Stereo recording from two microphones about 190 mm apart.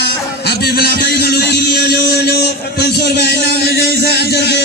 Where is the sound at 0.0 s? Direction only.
60° left (ahead or behind).